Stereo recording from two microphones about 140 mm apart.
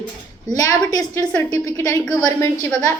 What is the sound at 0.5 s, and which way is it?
A woman's voice, 25° left (ahead or behind).